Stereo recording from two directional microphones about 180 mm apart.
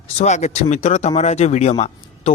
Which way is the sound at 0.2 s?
40° left (ahead or behind).